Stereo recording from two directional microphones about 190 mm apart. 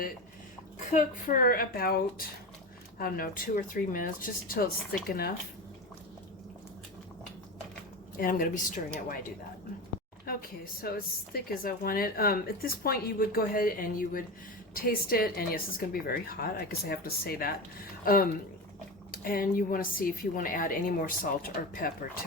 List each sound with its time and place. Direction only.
0.9 s a woman's voice: 45° left (ahead or behind)
8.2 s a woman's voice: 45° left (ahead or behind)
10.3 s a sound: 50° left (ahead or behind)
10.8 s a woman's voice: 55° left (ahead or behind)